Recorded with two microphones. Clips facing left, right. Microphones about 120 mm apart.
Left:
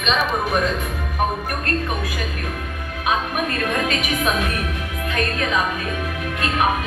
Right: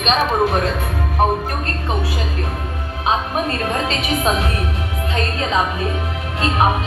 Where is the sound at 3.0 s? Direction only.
25° right (ahead or behind).